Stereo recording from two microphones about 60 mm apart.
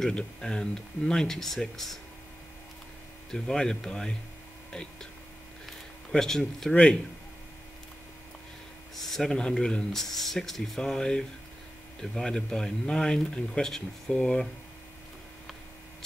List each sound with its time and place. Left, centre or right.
0.0 s speech: centre
3.3 s speech: centre
6.1 s speech: centre
6.7 s speech: centre
8.9 s speech: centre
9.9 s speech: centre